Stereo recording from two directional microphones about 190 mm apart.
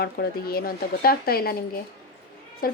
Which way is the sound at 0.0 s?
55° left (ahead or behind).